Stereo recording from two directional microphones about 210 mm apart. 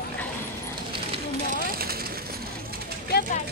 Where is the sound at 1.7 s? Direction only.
45° right (ahead or behind).